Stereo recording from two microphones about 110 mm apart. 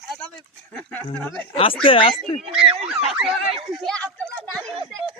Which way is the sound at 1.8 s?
55° left (ahead or behind).